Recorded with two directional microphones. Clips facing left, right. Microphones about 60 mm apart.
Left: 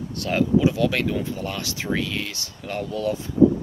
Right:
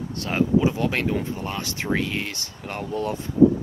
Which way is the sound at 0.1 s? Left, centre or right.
Right.